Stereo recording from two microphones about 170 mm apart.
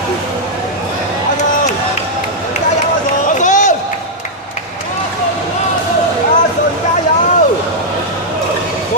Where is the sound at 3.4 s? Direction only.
45° left (ahead or behind).